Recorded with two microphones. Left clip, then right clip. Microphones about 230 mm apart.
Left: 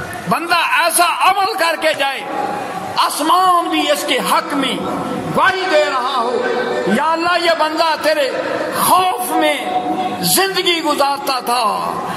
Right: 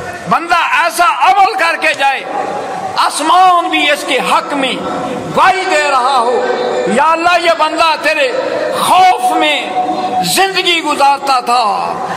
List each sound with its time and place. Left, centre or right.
0.3 s a man's voice: left